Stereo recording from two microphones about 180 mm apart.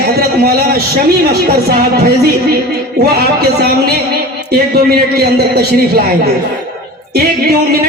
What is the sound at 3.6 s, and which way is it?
A man's voice, 60° right (ahead or behind).